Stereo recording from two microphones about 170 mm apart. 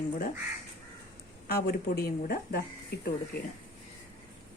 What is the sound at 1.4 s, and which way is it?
Speech, 65° left (ahead or behind).